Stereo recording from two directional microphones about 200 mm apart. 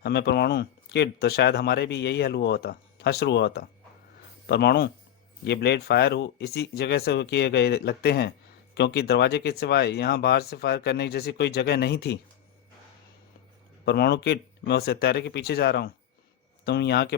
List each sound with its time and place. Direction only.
0.0 s speech: 55° left (ahead or behind)
13.8 s speech: 55° left (ahead or behind)